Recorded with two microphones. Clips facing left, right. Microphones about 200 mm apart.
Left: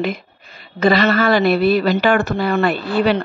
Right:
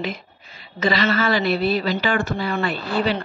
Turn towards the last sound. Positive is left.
turn(degrees=65)  # may be behind; listen again after turning